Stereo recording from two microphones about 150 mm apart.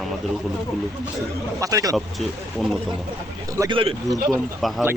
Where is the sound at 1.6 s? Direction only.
20° right (ahead or behind).